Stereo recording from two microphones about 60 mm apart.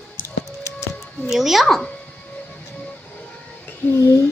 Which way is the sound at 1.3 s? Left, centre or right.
Centre.